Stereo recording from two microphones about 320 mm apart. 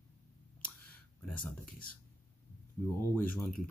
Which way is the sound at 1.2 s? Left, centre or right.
Centre.